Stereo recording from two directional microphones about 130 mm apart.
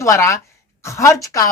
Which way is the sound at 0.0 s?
20° left (ahead or behind).